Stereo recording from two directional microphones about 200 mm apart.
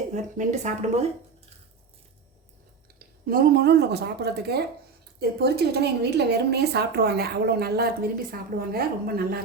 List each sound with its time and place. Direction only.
0.1 s speech: 35° right (ahead or behind)
3.2 s a woman's voice: 50° right (ahead or behind)